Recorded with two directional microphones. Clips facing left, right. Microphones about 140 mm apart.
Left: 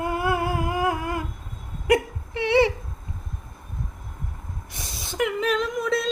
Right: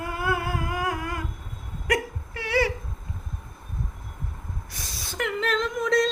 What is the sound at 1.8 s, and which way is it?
Whimper, 25° left (ahead or behind).